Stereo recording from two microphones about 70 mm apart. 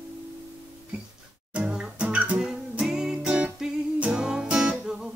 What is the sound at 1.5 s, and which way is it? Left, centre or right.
Music, centre.